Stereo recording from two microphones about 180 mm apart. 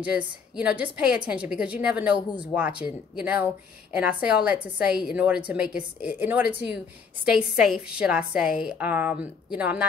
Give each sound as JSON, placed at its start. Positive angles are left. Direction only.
{"t": 0.0, "sound": "a woman's voice", "side_deg": -5}